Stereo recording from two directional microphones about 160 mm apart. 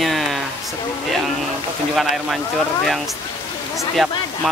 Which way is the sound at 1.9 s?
Centre (ahead or behind).